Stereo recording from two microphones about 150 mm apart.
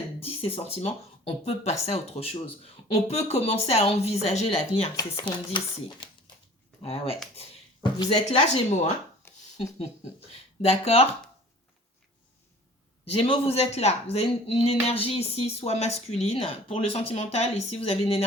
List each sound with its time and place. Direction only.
0.2 s speech: 40° left (ahead or behind)
5.1 s a woman's voice: 35° left (ahead or behind)
7.3 s a sound: 35° left (ahead or behind)
8.1 s speech: 50° left (ahead or behind)
13.1 s a woman's voice: 35° left (ahead or behind)